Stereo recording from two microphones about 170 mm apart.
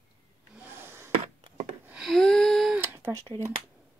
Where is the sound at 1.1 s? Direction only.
35° right (ahead or behind).